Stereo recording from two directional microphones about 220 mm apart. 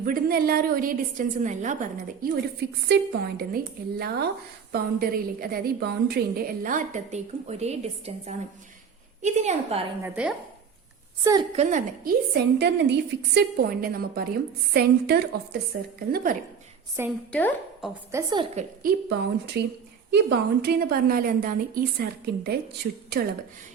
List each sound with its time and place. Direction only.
0.0 s a woman's voice: 40° right (ahead or behind)
10.0 s speech: 5° right (ahead or behind)
11.2 s a woman's voice: 15° right (ahead or behind)
11.5 s a woman's voice: 30° right (ahead or behind)
12.3 s a woman's voice: 50° right (ahead or behind)
17.0 s a woman's voice: 10° right (ahead or behind)
17.3 s a woman's voice: centre (ahead or behind)
18.1 s a woman's voice: 15° right (ahead or behind)
18.5 s a woman's voice: 40° right (ahead or behind)